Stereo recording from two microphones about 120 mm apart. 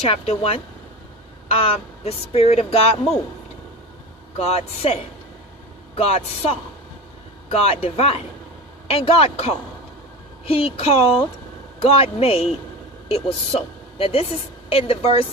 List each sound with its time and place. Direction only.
0.0 s a man's voice: 55° left (ahead or behind)
4.4 s a woman's voice: 60° left (ahead or behind)
6.0 s a woman's voice: 55° left (ahead or behind)